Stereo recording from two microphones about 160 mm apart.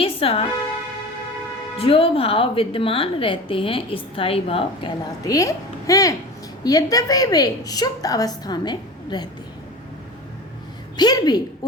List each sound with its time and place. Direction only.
0.0 s music: 35° left (ahead or behind)
1.8 s a woman's voice: 35° left (ahead or behind)
10.9 s a woman's voice: 25° left (ahead or behind)